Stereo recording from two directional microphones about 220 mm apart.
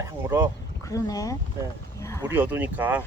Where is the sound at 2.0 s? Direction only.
15° left (ahead or behind).